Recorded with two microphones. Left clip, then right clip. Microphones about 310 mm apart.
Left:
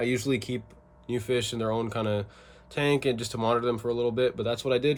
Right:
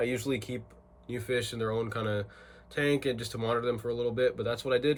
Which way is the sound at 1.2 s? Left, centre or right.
Left.